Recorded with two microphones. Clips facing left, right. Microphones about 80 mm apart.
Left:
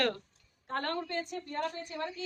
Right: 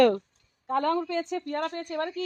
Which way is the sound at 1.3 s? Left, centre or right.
Right.